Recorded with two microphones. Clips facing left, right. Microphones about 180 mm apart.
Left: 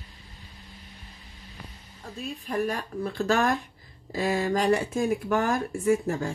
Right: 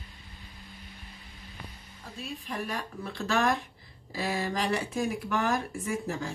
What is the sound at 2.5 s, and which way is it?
Speech, 45° left (ahead or behind).